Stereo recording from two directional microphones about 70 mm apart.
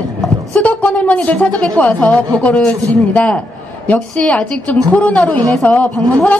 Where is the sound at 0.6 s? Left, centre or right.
Centre.